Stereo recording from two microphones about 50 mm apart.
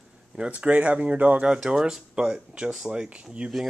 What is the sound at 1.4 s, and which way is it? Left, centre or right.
Speech, centre.